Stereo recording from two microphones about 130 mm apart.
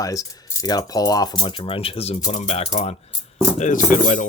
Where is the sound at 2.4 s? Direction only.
50° left (ahead or behind).